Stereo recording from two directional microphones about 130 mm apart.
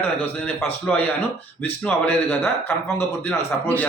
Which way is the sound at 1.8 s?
15° left (ahead or behind).